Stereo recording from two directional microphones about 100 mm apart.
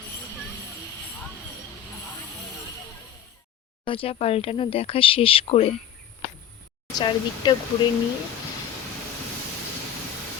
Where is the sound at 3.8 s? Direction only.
70° left (ahead or behind).